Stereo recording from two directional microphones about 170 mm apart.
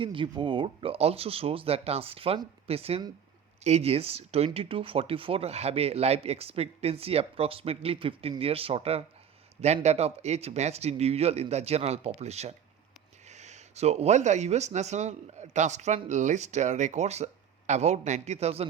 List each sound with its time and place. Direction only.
0.0 s speech: 30° right (ahead or behind)